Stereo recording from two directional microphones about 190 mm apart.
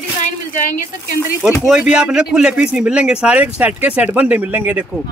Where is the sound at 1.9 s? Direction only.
5° right (ahead or behind).